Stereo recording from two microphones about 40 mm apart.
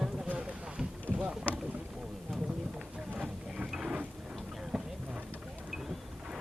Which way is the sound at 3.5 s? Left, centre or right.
Centre.